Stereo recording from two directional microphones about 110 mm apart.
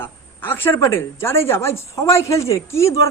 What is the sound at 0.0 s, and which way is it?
A woman's voice, 20° left (ahead or behind).